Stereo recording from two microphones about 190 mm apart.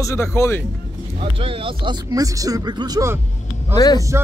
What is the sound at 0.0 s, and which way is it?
Music, 15° left (ahead or behind).